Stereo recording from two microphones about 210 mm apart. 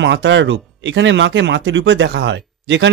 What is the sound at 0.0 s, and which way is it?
A man's voice, 60° right (ahead or behind).